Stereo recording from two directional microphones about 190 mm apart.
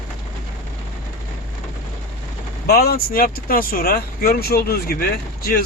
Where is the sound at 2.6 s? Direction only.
55° left (ahead or behind).